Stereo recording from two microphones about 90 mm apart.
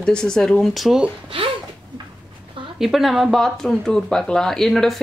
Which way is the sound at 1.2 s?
85° right.